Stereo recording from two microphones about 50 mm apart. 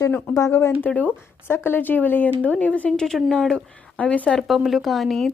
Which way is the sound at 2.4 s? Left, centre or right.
Left.